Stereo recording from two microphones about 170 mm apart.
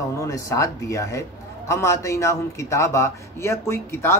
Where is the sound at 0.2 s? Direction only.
20° left (ahead or behind).